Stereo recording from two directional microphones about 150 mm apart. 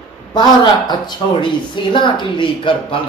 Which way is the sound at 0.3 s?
25° left (ahead or behind).